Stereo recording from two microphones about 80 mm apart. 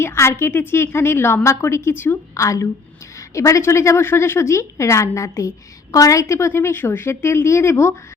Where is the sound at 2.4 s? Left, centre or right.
Left.